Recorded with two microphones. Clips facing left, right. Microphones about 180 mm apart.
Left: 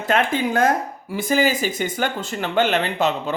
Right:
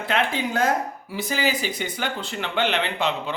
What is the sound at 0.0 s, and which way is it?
Speech, 45° left (ahead or behind).